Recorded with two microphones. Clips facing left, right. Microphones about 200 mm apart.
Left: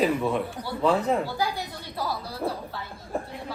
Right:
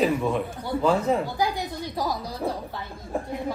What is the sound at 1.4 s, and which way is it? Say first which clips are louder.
Speech: right 3 dB; 15° right (ahead or behind).